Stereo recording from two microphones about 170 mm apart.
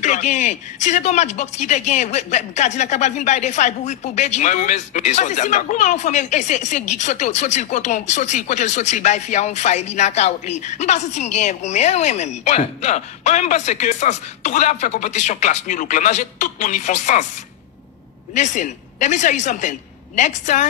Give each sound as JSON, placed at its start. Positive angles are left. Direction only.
{"t": 0.0, "sound": "speech", "side_deg": 45}
{"t": 18.3, "sound": "speech", "side_deg": 45}